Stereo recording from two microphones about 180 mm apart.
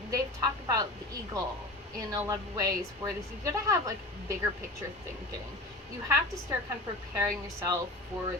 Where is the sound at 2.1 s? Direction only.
20° right (ahead or behind).